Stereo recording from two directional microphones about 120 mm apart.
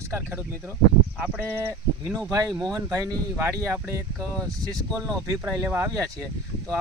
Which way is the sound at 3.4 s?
20° right (ahead or behind).